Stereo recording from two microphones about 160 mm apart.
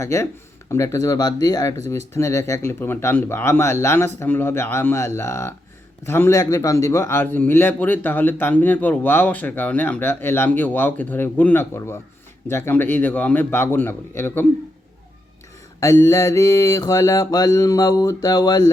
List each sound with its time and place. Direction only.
0.0 s speech: 15° left (ahead or behind)
0.7 s mantra: 15° left (ahead or behind)
2.1 s speech: 15° left (ahead or behind)
15.8 s mantra: 20° left (ahead or behind)